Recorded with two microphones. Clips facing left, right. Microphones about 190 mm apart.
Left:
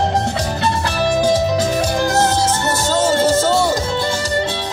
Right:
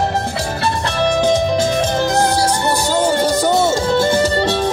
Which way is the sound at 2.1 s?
15° right (ahead or behind).